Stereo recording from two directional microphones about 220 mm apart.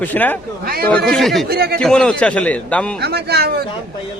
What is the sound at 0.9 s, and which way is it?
Speech, centre (ahead or behind).